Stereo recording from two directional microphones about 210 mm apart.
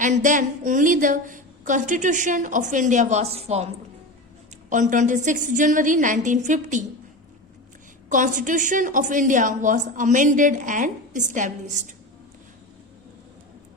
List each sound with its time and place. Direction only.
0.0 s a woman's voice: 35° right (ahead or behind)
4.7 s a woman's voice: 35° right (ahead or behind)
8.1 s a woman's voice: 35° right (ahead or behind)